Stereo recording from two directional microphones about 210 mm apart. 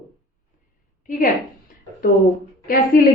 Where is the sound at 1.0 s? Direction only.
40° left (ahead or behind).